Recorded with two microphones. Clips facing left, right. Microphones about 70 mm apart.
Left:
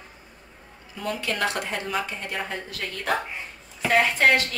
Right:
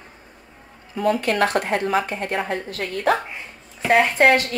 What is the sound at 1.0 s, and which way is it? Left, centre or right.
A woman's voice, right.